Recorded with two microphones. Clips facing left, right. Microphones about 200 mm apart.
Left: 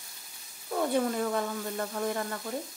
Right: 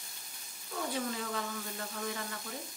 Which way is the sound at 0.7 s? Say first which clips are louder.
Left 9 dB; 55° left (ahead or behind).